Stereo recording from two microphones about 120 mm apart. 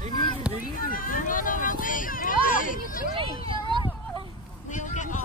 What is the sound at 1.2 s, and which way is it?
Vehicle, 90° left.